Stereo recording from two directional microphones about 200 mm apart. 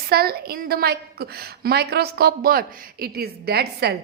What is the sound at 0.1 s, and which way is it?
A woman's voice, 50° right (ahead or behind).